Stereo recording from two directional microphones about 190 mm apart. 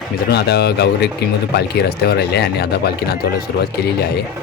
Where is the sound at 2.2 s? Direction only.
60° left (ahead or behind).